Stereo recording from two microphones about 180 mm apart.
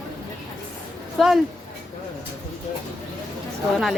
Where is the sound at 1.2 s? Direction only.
Centre (ahead or behind).